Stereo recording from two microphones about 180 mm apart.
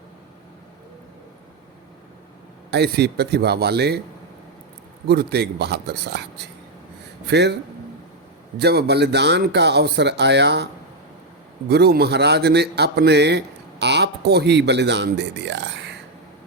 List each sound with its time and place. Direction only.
2.6 s a man's voice: 65° right (ahead or behind)
5.0 s a man's voice: 60° right (ahead or behind)
11.7 s a man's voice: 65° right (ahead or behind)